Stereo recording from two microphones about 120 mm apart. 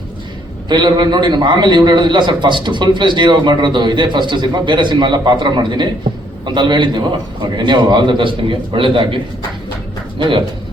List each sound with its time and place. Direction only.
0.7 s a man's voice: 40° right (ahead or behind)